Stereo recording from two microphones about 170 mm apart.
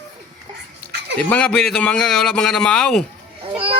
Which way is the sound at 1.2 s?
5° left (ahead or behind).